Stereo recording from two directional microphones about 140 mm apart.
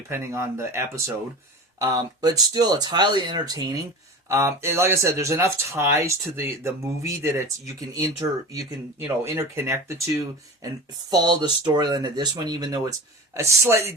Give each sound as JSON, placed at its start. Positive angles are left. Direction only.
{"t": 0.1, "sound": "speech", "side_deg": -20}
{"t": 1.8, "sound": "speech", "side_deg": -30}
{"t": 11.1, "sound": "speech", "side_deg": -30}